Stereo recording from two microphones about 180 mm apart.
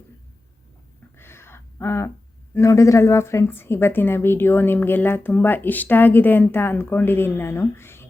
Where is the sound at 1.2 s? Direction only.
15° left (ahead or behind).